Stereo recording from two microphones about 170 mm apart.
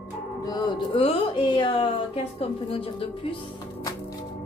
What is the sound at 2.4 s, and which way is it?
Speech, 35° left (ahead or behind).